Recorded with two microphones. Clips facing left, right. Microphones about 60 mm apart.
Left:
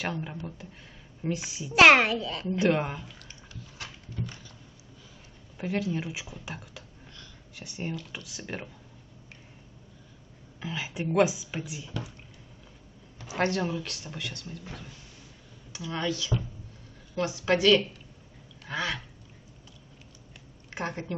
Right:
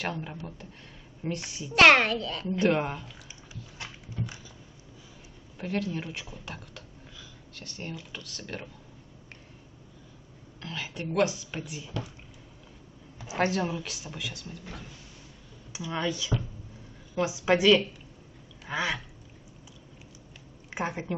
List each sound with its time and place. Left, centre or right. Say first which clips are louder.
0.0 s a child's voice: left 1 dB; centre
4.1 s dog: right 1 dB; centre
5.6 s a child's voice: left 1 dB; centre
10.6 s speech: left 3 dB; centre
11.5 s a child's voice: even; centre
13.4 s a child's voice: even; centre
15.9 s a woman's voice: even; centre
18.7 s duck: right 2 dB; centre
20.7 s a woman's voice: right 2 dB; centre